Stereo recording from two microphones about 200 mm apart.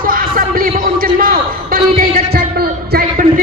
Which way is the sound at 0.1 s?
45° right (ahead or behind).